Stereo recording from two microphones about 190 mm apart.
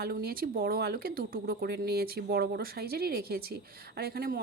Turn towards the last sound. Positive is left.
turn(degrees=-55)  # may be behind; listen again after turning